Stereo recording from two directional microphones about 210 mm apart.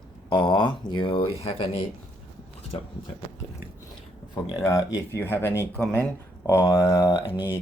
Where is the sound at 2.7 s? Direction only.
25° left (ahead or behind).